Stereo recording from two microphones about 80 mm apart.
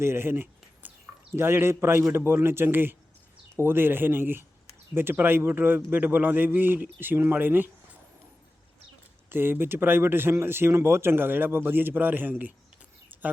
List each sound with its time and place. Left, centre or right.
0.0 s a sound: right
1.4 s speech: right
9.3 s speech: right